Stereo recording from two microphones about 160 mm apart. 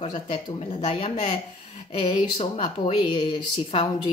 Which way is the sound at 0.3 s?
30° left (ahead or behind).